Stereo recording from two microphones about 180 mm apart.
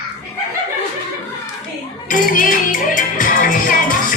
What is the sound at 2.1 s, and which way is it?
Music, 50° left (ahead or behind).